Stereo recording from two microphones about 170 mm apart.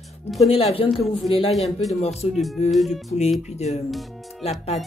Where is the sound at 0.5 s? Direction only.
35° left (ahead or behind).